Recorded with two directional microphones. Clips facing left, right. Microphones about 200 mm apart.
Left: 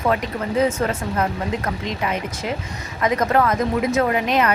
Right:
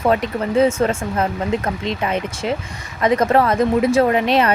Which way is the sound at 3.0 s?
30° right (ahead or behind).